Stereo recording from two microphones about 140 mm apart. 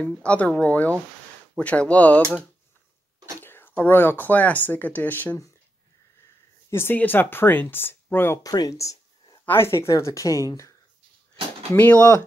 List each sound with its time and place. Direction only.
0.0 s speech: 10° left (ahead or behind)
3.3 s speech: 15° left (ahead or behind)
6.7 s speech: 15° left (ahead or behind)
11.7 s speech: 10° left (ahead or behind)